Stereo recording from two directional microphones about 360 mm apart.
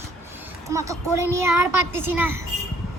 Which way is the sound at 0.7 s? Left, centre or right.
Centre.